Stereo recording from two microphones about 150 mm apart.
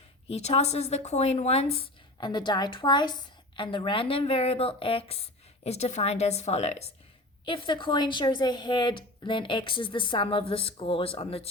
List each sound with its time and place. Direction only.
0.3 s a woman's voice: 45° left (ahead or behind)
7.4 s speech: 35° left (ahead or behind)